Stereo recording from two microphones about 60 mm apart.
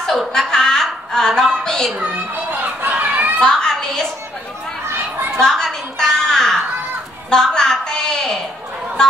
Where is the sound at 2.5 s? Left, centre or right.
Right.